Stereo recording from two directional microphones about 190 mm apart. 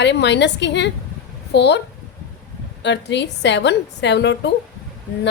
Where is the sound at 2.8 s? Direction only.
65° left (ahead or behind).